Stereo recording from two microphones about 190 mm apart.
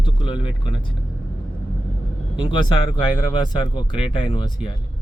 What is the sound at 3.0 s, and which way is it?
Speech, 25° left (ahead or behind).